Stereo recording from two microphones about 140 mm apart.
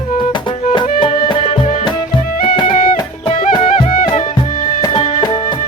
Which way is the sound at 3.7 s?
75° left (ahead or behind).